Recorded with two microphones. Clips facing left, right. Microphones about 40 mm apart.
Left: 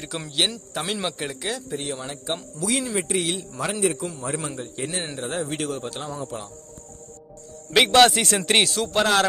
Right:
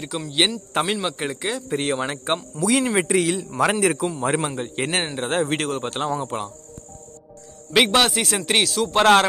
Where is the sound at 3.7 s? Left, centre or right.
Right.